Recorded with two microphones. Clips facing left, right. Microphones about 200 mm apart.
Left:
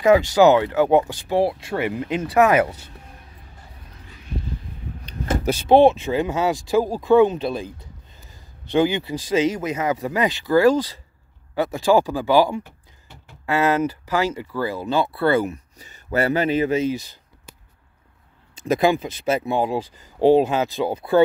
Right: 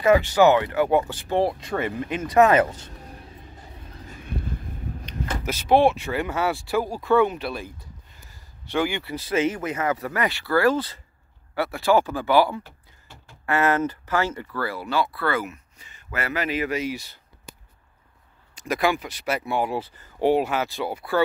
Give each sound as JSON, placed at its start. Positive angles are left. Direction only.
{"t": 0.0, "sound": "speech", "side_deg": 15}
{"t": 4.1, "sound": "a sound", "side_deg": -50}
{"t": 5.0, "sound": "speech", "side_deg": 35}
{"t": 18.5, "sound": "speech", "side_deg": 25}